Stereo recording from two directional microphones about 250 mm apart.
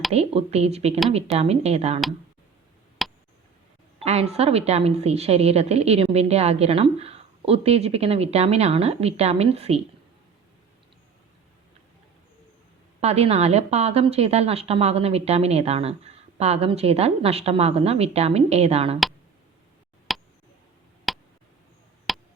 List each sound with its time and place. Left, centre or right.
0.1 s a woman's voice: right
3.0 s a sound: centre
4.0 s a woman's voice: right
13.0 s a woman's voice: right
20.1 s a sound: centre
22.1 s chop: centre